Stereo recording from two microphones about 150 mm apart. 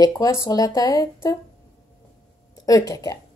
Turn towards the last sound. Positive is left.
turn(degrees=25)  # may be behind; listen again after turning